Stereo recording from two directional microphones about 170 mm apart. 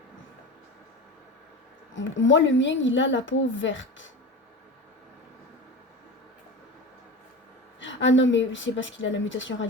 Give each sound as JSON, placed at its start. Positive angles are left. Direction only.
{"t": 2.0, "sound": "speech", "side_deg": 90}
{"t": 7.8, "sound": "speech", "side_deg": 90}